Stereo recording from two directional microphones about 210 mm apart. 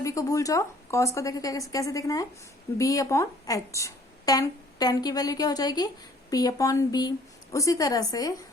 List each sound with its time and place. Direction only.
0.0 s speech: 15° left (ahead or behind)